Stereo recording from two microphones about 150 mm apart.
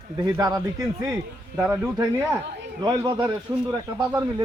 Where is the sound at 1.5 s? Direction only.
5° right (ahead or behind).